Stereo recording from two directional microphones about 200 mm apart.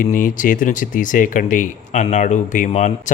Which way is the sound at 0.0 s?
40° left (ahead or behind).